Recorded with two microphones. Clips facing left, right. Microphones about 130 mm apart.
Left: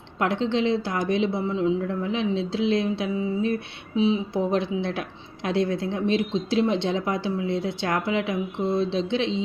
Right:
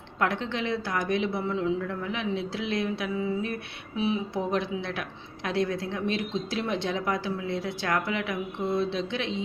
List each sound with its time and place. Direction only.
0.2 s a woman's voice: 25° left (ahead or behind)